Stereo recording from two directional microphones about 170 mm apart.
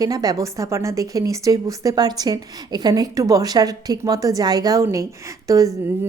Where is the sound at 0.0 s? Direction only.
20° right (ahead or behind).